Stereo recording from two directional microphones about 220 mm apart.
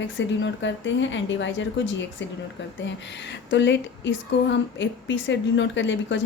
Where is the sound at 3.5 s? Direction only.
50° left (ahead or behind).